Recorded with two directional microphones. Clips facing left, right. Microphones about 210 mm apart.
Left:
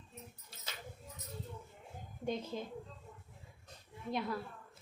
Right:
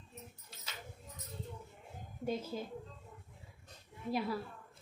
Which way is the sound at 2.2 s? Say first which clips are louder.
Right 1 dB; 5° right (ahead or behind).